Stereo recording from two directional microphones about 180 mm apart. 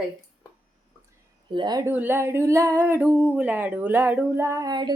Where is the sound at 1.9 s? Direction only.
10° right (ahead or behind).